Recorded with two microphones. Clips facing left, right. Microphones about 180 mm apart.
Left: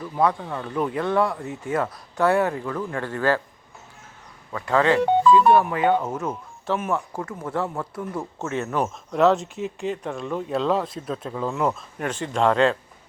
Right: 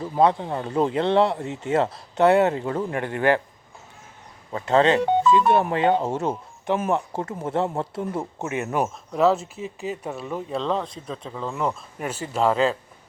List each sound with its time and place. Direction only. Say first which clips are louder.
0.0 s speech: right 3 dB; 25° right (ahead or behind)
4.5 s speech: right 1 dB; 25° right (ahead or behind)
9.1 s speech: left 1 dB; centre (ahead or behind)